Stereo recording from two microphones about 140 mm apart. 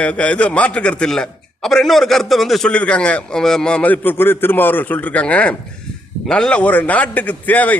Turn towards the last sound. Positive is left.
turn(degrees=10)  # may be behind; listen again after turning